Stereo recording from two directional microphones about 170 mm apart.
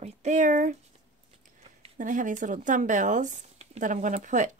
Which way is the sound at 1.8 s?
50° right (ahead or behind).